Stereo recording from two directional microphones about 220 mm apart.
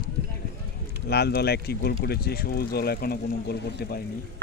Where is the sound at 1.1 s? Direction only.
45° left (ahead or behind).